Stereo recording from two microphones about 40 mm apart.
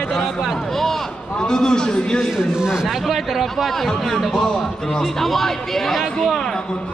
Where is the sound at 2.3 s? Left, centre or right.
Centre.